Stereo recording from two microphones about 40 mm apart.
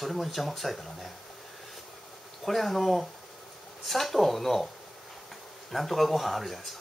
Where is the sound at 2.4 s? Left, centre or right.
Centre.